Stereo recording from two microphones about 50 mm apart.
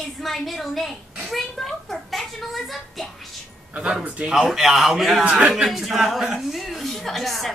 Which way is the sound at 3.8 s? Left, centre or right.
Centre.